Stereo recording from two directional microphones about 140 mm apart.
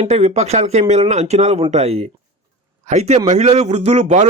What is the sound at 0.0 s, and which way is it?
Speech, 50° right (ahead or behind).